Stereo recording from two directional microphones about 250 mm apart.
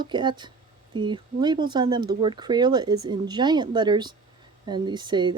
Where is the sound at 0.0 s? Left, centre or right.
Centre.